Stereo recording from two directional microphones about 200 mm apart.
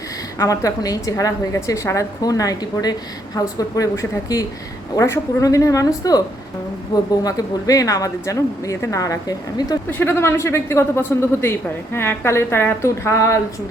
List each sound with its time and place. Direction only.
0.3 s speech: 15° left (ahead or behind)